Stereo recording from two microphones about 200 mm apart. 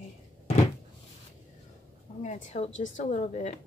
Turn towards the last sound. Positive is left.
turn(degrees=35)  # may be behind; listen again after turning